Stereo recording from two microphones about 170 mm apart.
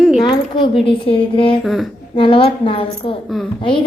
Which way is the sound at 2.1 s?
30° left (ahead or behind).